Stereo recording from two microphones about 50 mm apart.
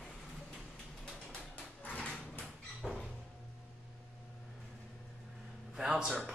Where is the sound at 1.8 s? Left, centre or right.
Left.